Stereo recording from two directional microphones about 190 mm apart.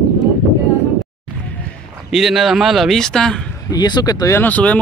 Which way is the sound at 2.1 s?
Centre (ahead or behind).